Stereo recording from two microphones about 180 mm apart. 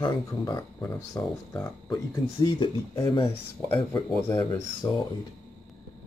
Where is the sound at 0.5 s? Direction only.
15° left (ahead or behind).